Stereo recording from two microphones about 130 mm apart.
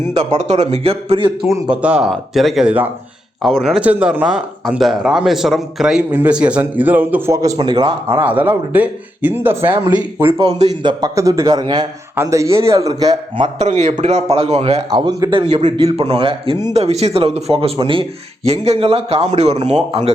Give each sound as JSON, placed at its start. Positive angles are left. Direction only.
{"t": 0.2, "sound": "a man's voice", "side_deg": -60}
{"t": 1.7, "sound": "speech", "side_deg": -10}
{"t": 3.4, "sound": "speech", "side_deg": 0}
{"t": 8.1, "sound": "speech", "side_deg": -15}
{"t": 10.3, "sound": "speech", "side_deg": -50}
{"t": 10.8, "sound": "a man's voice", "side_deg": -25}
{"t": 12.1, "sound": "a man's voice", "side_deg": -20}
{"t": 12.9, "sound": "a man's voice", "side_deg": -35}
{"t": 13.6, "sound": "a man's voice", "side_deg": -60}
{"t": 14.8, "sound": "a man's voice", "side_deg": -30}
{"t": 18.4, "sound": "a man's voice", "side_deg": -55}